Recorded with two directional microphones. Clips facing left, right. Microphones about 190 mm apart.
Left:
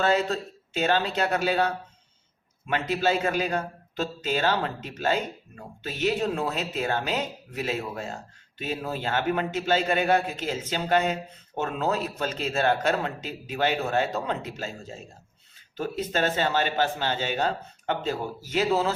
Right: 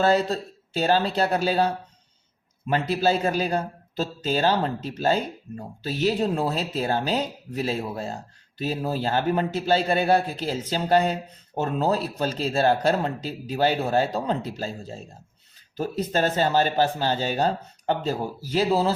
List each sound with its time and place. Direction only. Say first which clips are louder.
0.0 s a man's voice: right 3 dB; 35° right (ahead or behind)